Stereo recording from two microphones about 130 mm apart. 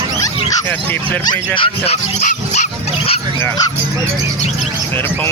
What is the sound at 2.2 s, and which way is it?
Speech, 65° left (ahead or behind).